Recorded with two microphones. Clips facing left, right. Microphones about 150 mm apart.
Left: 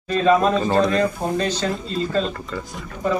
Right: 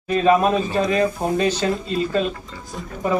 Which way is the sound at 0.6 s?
50° left (ahead or behind).